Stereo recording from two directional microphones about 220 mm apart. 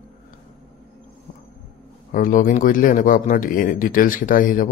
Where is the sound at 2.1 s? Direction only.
40° left (ahead or behind).